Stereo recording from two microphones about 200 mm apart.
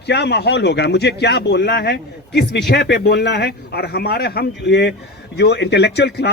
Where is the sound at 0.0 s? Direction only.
55° left (ahead or behind).